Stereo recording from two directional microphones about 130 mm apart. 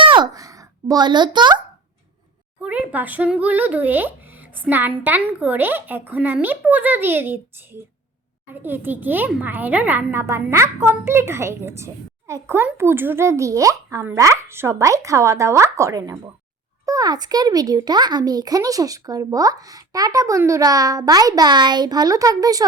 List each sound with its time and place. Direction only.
0.0 s a sound: 40° right (ahead or behind)
0.3 s a child's voice: 25° right (ahead or behind)
2.6 s speech: 10° right (ahead or behind); by 22.6 s 30° right (ahead or behind)